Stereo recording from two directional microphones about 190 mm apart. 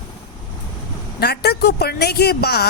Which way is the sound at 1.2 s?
60° left (ahead or behind).